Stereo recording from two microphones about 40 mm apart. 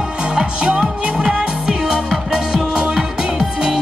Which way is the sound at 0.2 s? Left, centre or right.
Centre.